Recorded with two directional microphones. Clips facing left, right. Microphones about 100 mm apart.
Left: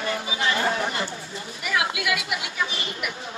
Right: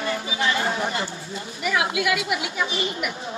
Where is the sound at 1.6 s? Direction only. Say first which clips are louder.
Right 3 dB; 30° right (ahead or behind).